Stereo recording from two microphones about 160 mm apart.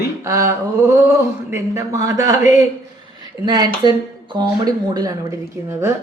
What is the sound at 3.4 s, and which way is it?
Speech, 25° right (ahead or behind).